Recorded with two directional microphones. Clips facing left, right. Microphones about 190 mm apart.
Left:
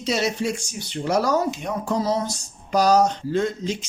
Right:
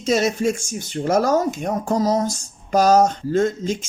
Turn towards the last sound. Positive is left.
turn(degrees=-50)  # may be behind; listen again after turning